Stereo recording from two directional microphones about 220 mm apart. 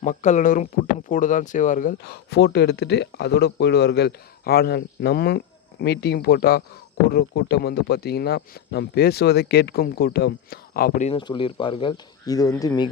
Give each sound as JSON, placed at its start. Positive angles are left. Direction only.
{"t": 0.0, "sound": "speech", "side_deg": 35}
{"t": 11.2, "sound": "speech", "side_deg": 20}